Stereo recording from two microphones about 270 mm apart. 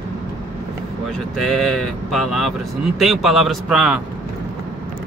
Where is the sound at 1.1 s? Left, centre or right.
Centre.